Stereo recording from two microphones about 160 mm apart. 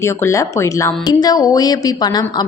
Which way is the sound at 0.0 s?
20° left (ahead or behind).